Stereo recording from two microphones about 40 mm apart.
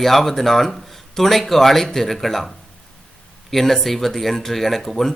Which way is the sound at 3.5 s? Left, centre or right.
Centre.